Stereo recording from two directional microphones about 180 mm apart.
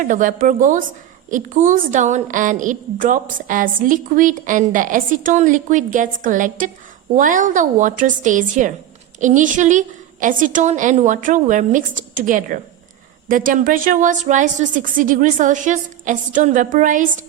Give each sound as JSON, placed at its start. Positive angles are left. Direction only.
{"t": 0.0, "sound": "a woman's voice", "side_deg": -45}